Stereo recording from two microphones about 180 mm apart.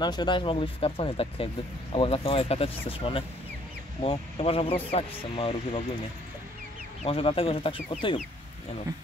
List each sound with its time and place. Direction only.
0.0 s speech: 25° left (ahead or behind)
7.0 s speech: 30° left (ahead or behind)